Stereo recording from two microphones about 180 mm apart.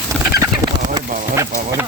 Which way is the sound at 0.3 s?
20° right (ahead or behind).